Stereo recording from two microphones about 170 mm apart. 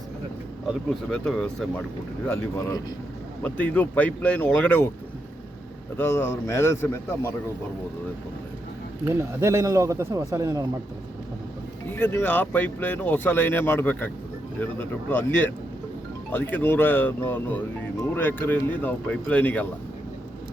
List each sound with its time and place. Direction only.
0.7 s speech: centre (ahead or behind)
2.2 s speech: 15° left (ahead or behind)
6.0 s speech: 15° left (ahead or behind)
9.0 s speech: 15° right (ahead or behind)
11.9 s speech: 10° left (ahead or behind)